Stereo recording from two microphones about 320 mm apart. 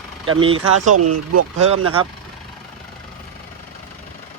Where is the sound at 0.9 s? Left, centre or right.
Right.